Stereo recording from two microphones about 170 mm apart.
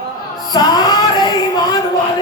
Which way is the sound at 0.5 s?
25° left (ahead or behind).